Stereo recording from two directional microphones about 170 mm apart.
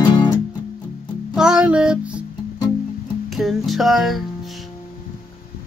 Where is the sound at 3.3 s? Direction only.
Centre (ahead or behind).